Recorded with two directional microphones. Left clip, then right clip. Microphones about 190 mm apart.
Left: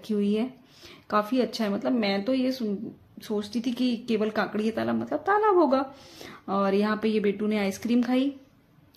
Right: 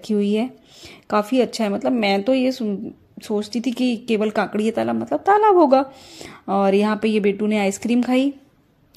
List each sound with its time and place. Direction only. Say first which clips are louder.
0.0 s a woman's voice: right 6 dB; 35° right (ahead or behind)